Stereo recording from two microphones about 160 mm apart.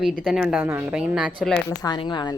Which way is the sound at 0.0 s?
Centre (ahead or behind).